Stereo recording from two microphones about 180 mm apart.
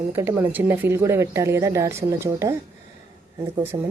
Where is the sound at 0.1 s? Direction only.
10° right (ahead or behind).